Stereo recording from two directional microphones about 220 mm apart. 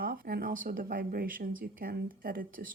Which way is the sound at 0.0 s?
40° right (ahead or behind).